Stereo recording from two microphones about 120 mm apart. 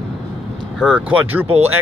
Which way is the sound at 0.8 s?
10° right (ahead or behind).